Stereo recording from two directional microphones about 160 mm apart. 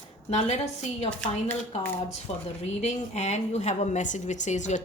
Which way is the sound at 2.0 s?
45° left (ahead or behind).